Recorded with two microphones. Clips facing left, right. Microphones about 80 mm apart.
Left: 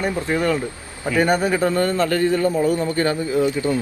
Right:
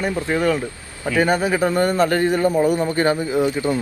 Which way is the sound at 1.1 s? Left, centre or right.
Centre.